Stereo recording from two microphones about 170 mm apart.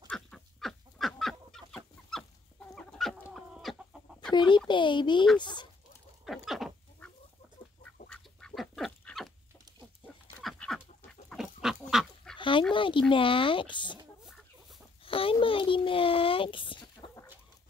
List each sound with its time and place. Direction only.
0.1 s chicken: 5° left (ahead or behind)
4.3 s speech: 25° left (ahead or behind)
5.4 s chicken: 25° left (ahead or behind)
6.2 s duck: centre (ahead or behind)
8.1 s duck: 5° left (ahead or behind)
10.0 s a sound: 30° left (ahead or behind)
10.4 s duck: centre (ahead or behind)
11.2 s bird: centre (ahead or behind)
12.4 s dog: 30° left (ahead or behind)
12.7 s speech: 30° left (ahead or behind)
14.2 s chicken: centre (ahead or behind)
15.0 s a sound: 30° left (ahead or behind)